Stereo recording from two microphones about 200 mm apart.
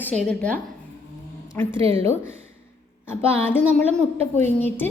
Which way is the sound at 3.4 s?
10° left (ahead or behind).